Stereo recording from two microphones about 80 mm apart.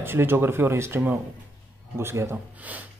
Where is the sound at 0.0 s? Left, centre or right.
Right.